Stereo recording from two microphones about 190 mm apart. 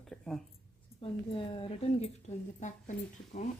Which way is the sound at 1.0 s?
25° left (ahead or behind).